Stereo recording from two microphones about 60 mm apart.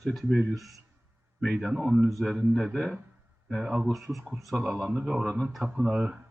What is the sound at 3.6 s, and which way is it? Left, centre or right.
Speech, centre.